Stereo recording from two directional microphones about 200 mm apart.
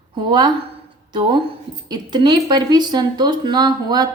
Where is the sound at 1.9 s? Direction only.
20° right (ahead or behind).